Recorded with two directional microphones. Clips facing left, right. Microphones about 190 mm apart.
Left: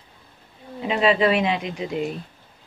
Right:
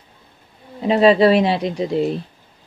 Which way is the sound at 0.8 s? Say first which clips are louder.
Right 7 dB; 35° right (ahead or behind).